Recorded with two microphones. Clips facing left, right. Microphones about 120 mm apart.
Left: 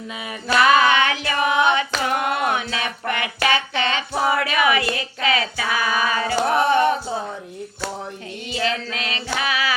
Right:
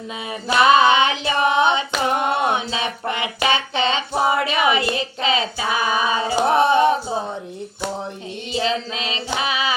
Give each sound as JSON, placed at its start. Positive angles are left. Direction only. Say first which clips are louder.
{"t": 0.4, "sound": "singing", "louder": "right 2 dB", "side_deg": -25}
{"t": 8.5, "sound": "female singing", "louder": "right 2 dB", "side_deg": -25}